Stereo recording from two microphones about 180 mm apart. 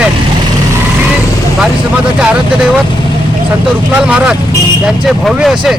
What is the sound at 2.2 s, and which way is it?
Speech, 5° right (ahead or behind).